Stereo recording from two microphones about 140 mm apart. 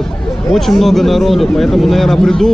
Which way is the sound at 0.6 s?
Centre (ahead or behind).